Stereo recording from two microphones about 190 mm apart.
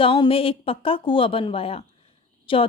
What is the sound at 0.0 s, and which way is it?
Speech, 30° left (ahead or behind).